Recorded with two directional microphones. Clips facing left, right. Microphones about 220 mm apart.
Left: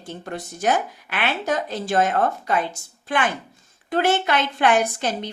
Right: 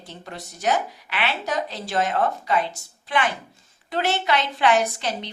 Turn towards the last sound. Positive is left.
turn(degrees=50)  # may be behind; listen again after turning